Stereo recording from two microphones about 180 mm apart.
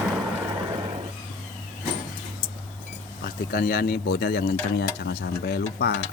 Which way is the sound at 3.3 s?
55° left (ahead or behind).